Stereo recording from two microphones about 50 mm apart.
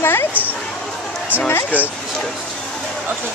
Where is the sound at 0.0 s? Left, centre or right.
Left.